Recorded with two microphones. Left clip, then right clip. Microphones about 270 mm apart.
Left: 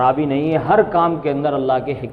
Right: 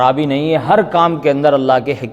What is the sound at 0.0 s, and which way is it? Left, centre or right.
A man's voice, right.